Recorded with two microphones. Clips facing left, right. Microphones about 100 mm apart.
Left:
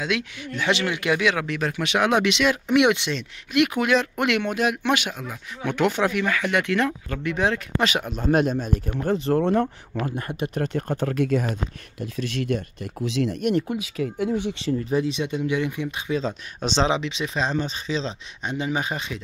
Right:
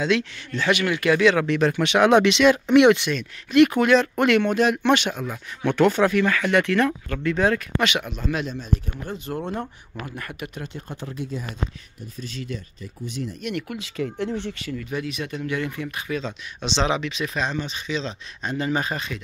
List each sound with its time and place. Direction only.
0.0 s speech: 5° left (ahead or behind)
0.7 s speech: 20° left (ahead or behind)
1.3 s speech: 5° left (ahead or behind)
3.0 s speech: 25° left (ahead or behind)
3.5 s speech: 10° left (ahead or behind)
7.8 s speech: 40° left (ahead or behind)
9.5 s speech: 55° left (ahead or behind)
10.0 s speech: 25° left (ahead or behind)
10.5 s speech: 55° left (ahead or behind); by 13.4 s 85° left
13.7 s speech: 5° left (ahead or behind)
14.5 s speech: 25° left (ahead or behind)
16.2 s speech: 40° left (ahead or behind)
16.8 s speech: 25° left (ahead or behind)
18.4 s speech: 15° left (ahead or behind)